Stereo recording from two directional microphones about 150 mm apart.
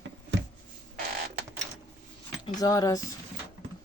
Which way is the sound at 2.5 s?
25° left (ahead or behind).